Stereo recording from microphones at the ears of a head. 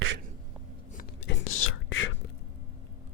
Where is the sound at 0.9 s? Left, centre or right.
Left.